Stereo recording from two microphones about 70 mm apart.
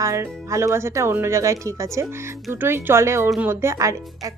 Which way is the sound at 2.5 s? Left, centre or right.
Right.